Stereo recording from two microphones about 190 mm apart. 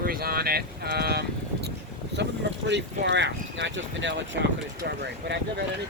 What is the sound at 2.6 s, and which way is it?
Speech, 65° right (ahead or behind).